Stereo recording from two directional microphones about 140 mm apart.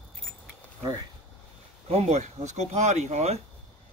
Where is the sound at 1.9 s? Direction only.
50° right (ahead or behind).